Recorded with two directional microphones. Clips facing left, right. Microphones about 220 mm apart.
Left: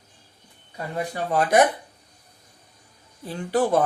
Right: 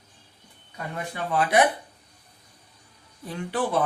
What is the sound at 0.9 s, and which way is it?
Speech, 40° left (ahead or behind).